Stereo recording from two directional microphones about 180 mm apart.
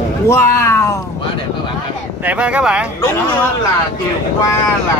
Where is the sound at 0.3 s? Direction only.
15° left (ahead or behind).